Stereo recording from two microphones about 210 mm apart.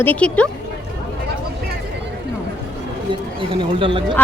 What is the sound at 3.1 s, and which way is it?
Speech, 25° right (ahead or behind).